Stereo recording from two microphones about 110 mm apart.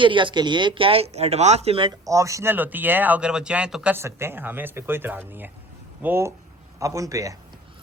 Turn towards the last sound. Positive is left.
turn(degrees=-30)  # may be behind; listen again after turning